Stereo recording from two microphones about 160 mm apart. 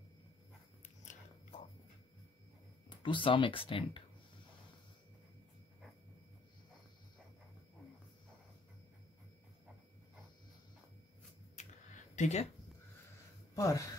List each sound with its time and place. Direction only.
2.9 s speech: 30° left (ahead or behind)
11.5 s a sound: 50° left (ahead or behind)
13.6 s speech: 20° left (ahead or behind)